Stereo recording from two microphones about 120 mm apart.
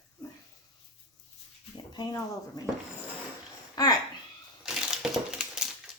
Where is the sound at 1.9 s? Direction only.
30° left (ahead or behind).